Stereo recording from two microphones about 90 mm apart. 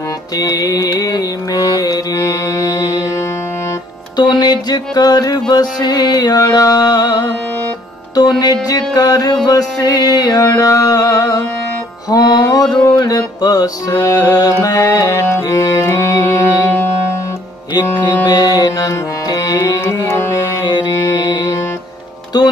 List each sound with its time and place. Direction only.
0.4 s music: 45° left (ahead or behind)
4.2 s music: 55° left (ahead or behind)
12.1 s music: 50° left (ahead or behind); by 16.9 s 25° left (ahead or behind)
18.2 s music: 45° left (ahead or behind)
19.8 s music: 30° left (ahead or behind)
20.6 s music: 50° left (ahead or behind)